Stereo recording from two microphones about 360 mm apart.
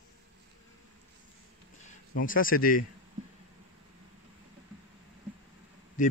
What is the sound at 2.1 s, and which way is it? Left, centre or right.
Speech, left.